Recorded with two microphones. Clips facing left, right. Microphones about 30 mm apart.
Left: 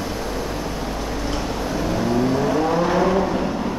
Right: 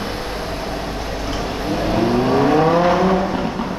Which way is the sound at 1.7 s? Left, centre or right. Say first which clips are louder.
Right 5 dB; right.